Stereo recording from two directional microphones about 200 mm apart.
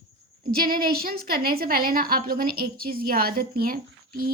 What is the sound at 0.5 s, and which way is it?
A woman's voice, 50° right (ahead or behind).